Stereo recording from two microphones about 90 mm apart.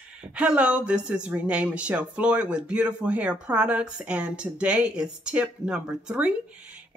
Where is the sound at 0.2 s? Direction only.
15° right (ahead or behind).